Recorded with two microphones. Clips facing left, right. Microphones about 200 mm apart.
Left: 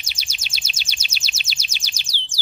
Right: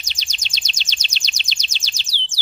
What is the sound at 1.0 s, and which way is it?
Bird, 5° left (ahead or behind).